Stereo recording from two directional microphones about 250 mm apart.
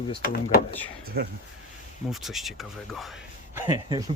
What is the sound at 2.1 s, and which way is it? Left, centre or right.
Speech, centre.